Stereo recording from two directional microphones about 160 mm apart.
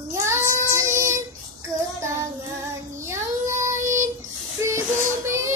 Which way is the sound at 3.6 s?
15° right (ahead or behind).